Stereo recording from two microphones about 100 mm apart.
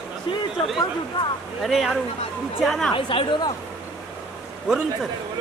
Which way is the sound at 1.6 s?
Centre (ahead or behind).